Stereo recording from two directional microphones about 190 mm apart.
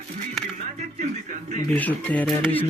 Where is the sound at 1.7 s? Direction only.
10° left (ahead or behind).